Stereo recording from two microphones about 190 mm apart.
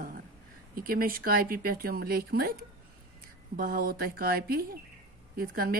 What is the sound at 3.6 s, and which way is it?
Speech, 50° right (ahead or behind).